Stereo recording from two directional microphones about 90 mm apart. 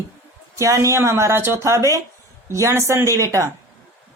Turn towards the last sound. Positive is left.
turn(degrees=-35)  # may be behind; listen again after turning